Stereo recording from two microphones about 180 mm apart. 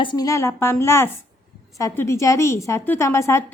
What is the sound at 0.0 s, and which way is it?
A woman's voice, 25° left (ahead or behind).